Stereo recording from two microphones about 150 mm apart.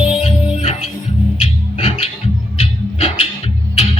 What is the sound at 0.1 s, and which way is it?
Music, 45° left (ahead or behind).